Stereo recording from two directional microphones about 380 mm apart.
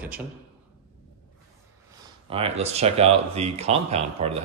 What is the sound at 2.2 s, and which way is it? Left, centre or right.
Speech, centre.